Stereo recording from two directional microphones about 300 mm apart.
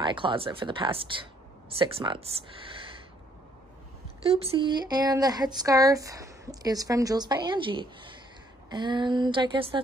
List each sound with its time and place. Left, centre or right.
0.0 s speech: centre
4.2 s speech: centre